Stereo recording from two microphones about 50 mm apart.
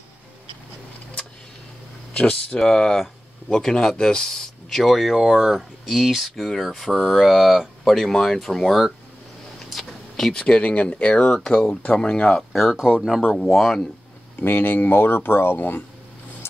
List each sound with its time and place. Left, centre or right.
2.1 s speech: left
2.6 s speech: centre
5.1 s speech: centre
9.7 s a sound: centre
10.6 s speech: left
12.7 s speech: centre
13.1 s speech: centre
14.4 s speech: left
15.5 s speech: left